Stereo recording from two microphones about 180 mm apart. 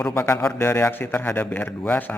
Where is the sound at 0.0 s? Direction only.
10° left (ahead or behind).